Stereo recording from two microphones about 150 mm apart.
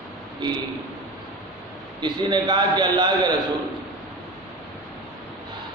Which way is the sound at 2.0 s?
30° right (ahead or behind).